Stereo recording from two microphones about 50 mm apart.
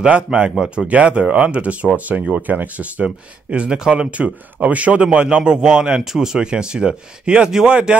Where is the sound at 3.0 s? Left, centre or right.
Right.